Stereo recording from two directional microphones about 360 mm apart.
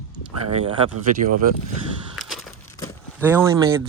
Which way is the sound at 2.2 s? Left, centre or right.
Centre.